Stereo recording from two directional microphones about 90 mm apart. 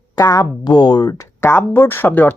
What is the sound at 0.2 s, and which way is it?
Speech, 45° left (ahead or behind).